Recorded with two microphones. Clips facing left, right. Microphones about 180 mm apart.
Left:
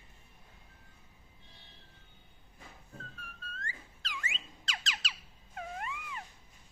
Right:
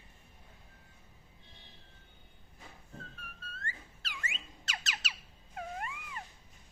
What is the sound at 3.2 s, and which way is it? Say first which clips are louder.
Music: left 1 dB; 10° right (ahead or behind).